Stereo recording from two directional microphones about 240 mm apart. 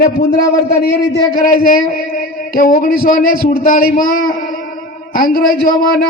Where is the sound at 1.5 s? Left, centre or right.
Left.